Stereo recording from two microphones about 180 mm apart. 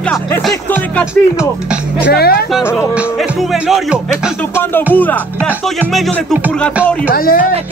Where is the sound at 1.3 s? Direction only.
5° right (ahead or behind).